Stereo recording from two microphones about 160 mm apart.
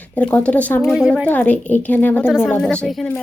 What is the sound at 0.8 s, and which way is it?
Speech, 5° right (ahead or behind).